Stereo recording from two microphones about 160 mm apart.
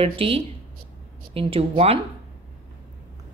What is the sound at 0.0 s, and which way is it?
A woman's voice, 35° right (ahead or behind).